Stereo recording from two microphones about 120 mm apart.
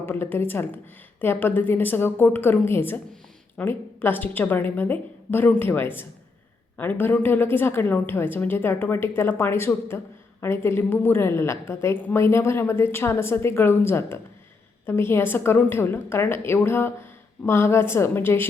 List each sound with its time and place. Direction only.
0.0 s a woman's voice: 20° left (ahead or behind)